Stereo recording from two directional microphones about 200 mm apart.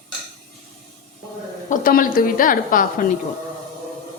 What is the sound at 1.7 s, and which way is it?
A woman's voice, 45° left (ahead or behind).